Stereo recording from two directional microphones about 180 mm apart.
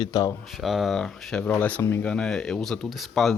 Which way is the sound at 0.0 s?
20° left (ahead or behind).